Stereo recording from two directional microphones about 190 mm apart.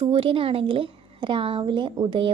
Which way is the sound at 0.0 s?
30° right (ahead or behind).